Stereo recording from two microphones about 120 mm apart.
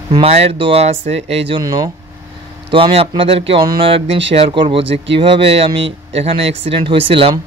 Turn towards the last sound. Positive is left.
turn(degrees=-50)  # may be behind; listen again after turning